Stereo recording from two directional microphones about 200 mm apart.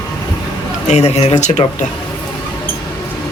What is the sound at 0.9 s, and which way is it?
Speech, 30° left (ahead or behind).